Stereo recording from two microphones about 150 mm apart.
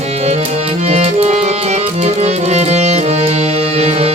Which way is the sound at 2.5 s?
45° right (ahead or behind).